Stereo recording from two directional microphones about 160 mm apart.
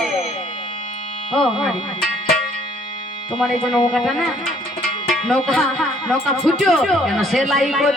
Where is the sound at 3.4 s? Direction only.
5° left (ahead or behind).